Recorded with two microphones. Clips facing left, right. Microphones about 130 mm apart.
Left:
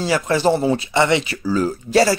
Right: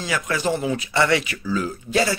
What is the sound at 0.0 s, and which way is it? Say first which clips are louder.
Speech: left 7 dB; 30° left (ahead or behind).